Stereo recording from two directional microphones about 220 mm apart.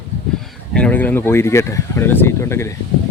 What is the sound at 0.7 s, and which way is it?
Speech, 5° left (ahead or behind).